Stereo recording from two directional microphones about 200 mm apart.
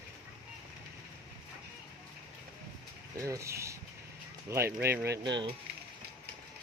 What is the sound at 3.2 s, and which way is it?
Speech, 15° right (ahead or behind).